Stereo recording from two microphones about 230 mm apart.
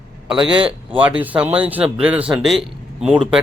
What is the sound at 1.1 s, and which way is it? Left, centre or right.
Speech, centre.